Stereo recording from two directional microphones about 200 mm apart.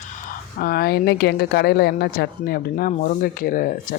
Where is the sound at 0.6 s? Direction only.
50° left (ahead or behind).